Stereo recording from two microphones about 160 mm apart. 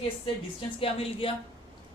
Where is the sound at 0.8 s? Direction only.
35° left (ahead or behind).